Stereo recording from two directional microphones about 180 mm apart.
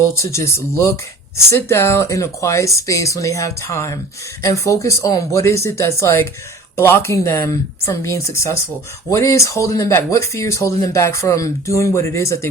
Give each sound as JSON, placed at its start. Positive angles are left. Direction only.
{"t": 0.0, "sound": "speech", "side_deg": 15}